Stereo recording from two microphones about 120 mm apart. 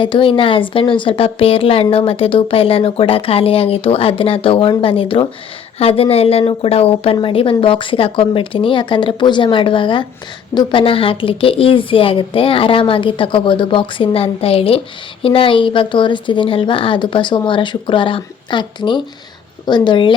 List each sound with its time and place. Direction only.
0.0 s a woman's voice: 45° left (ahead or behind)